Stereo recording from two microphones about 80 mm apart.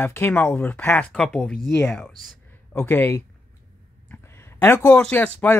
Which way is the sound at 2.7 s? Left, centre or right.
Left.